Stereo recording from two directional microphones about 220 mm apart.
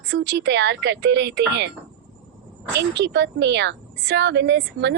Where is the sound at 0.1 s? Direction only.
55° right (ahead or behind).